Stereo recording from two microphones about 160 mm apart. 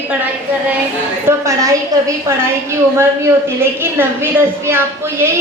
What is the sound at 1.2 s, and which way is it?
Speech, 20° right (ahead or behind).